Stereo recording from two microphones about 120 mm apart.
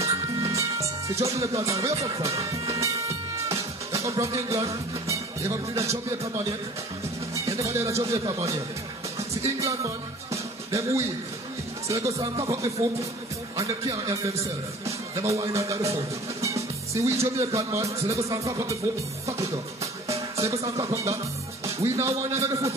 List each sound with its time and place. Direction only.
0.0 s music: 25° right (ahead or behind)
1.4 s speech: 25° right (ahead or behind)
9.6 s music: 25° right (ahead or behind)
11.9 s speech: 25° right (ahead or behind)
19.2 s music: 25° right (ahead or behind)
20.6 s speech: 25° right (ahead or behind)